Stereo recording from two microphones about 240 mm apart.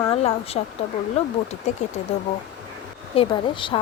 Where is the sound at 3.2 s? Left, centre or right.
Left.